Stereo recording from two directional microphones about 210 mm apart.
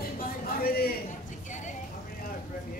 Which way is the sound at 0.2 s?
45° left (ahead or behind).